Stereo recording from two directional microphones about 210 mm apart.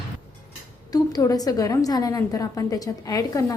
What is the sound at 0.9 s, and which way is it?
A woman's voice, 20° left (ahead or behind).